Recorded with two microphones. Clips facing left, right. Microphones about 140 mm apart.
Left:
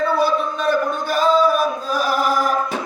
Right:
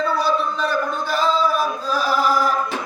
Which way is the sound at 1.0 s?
50° left (ahead or behind).